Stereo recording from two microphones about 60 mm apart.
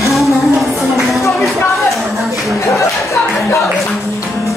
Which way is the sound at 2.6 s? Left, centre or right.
Left.